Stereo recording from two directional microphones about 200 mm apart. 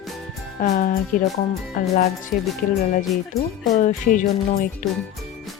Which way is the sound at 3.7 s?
40° left (ahead or behind).